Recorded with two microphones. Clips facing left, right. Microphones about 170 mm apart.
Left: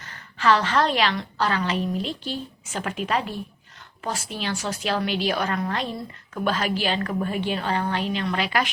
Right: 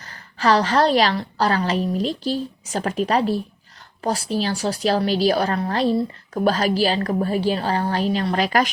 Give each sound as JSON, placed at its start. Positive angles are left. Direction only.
{"t": 0.0, "sound": "a woman's voice", "side_deg": -35}